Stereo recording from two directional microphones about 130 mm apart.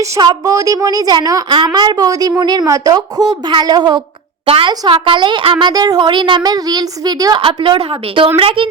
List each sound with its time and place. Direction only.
0.0 s a woman's voice: 30° right (ahead or behind)
4.4 s a woman's voice: 45° right (ahead or behind)
4.7 s speech: 30° right (ahead or behind)
4.9 s speech: 40° right (ahead or behind)